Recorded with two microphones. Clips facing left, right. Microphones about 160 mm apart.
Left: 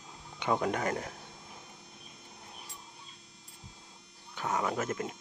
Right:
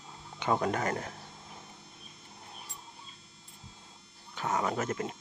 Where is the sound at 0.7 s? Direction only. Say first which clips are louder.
Even; 10° left (ahead or behind).